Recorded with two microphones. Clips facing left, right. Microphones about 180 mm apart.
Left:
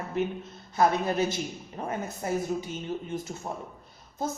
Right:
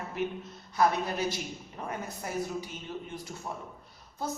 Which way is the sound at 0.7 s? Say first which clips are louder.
Left 3 dB; 25° left (ahead or behind).